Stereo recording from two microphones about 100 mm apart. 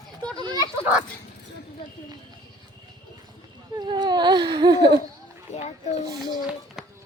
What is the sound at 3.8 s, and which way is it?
Speech, 50° right (ahead or behind).